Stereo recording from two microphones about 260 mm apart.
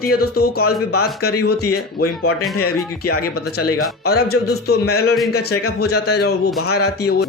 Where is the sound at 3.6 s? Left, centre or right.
Left.